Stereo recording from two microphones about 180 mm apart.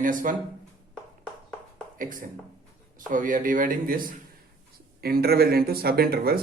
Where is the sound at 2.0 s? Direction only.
50° right (ahead or behind).